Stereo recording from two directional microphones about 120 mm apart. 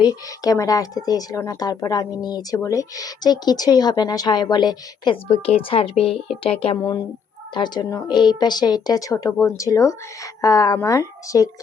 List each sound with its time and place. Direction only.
0.0 s a woman's voice: 30° left (ahead or behind); by 6.7 s 50° left (ahead or behind)
6.7 s a woman's voice: 30° left (ahead or behind)